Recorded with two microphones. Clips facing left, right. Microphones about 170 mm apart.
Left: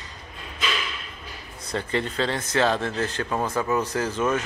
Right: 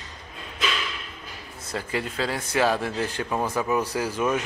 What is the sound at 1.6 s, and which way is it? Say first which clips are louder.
Speech: left 3 dB; 5° right (ahead or behind).